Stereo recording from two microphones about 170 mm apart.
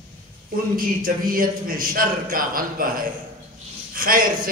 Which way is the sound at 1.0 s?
55° right (ahead or behind).